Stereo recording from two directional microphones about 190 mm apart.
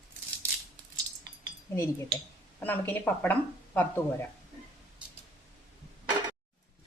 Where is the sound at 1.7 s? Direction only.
15° left (ahead or behind).